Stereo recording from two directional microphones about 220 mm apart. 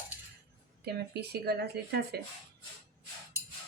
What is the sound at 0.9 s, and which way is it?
Speech, 45° right (ahead or behind).